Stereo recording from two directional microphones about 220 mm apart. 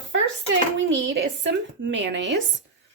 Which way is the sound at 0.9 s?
55° right (ahead or behind).